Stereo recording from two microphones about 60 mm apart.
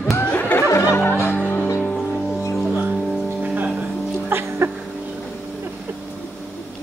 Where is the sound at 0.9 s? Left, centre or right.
Left.